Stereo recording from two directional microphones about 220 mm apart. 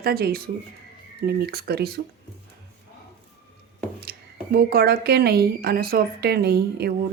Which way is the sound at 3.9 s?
45° right (ahead or behind).